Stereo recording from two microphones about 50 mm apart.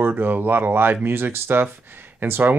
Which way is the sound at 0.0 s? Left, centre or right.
Right.